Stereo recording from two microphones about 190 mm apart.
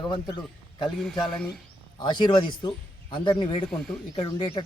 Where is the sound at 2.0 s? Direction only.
25° left (ahead or behind).